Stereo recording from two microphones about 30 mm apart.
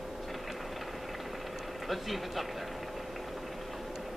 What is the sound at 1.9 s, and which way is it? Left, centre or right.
Speech, centre.